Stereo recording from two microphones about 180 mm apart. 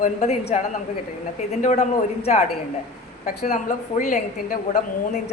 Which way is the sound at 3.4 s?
45° left (ahead or behind).